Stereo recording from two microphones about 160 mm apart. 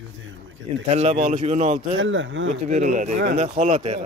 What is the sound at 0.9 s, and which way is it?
Speech, 45° right (ahead or behind).